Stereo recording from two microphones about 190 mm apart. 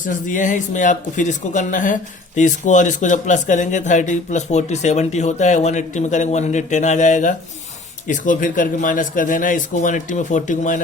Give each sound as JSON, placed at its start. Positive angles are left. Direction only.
{"t": 0.0, "sound": "speech", "side_deg": 40}